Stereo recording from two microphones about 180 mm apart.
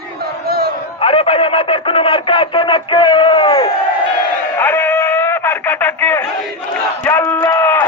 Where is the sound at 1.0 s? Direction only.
30° left (ahead or behind).